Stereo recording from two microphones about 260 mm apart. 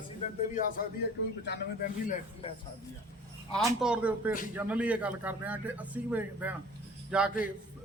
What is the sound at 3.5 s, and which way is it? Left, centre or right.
A man's voice, centre.